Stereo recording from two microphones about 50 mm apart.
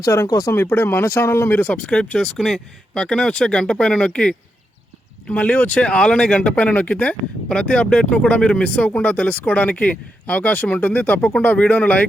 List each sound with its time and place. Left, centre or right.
0.1 s speech: left
0.5 s speech: left
1.5 s speech: left
1.9 s speech: centre